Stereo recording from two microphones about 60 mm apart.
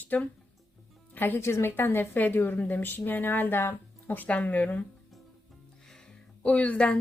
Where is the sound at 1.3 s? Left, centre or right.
Left.